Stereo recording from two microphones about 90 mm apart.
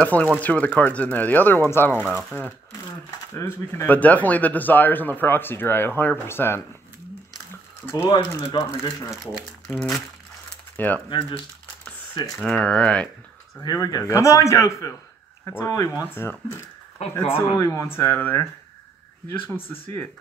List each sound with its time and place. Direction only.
0.0 s speech: 15° left (ahead or behind)
3.3 s a man's voice: 30° left (ahead or behind)
3.8 s speech: 20° left (ahead or behind)
7.8 s speech: 25° left (ahead or behind)
8.5 s a man's voice: 40° left (ahead or behind)
9.2 s speech: 5° left (ahead or behind)
11.1 s speech: 80° left
12.4 s speech: 10° left (ahead or behind)
13.6 s a man's voice: 45° left (ahead or behind); by 19.8 s 20° left (ahead or behind)